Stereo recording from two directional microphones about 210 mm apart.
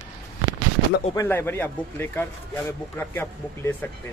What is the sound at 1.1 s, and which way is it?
Speech, 10° left (ahead or behind).